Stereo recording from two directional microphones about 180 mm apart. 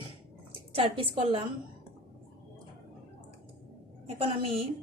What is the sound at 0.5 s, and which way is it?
Speech, 30° right (ahead or behind).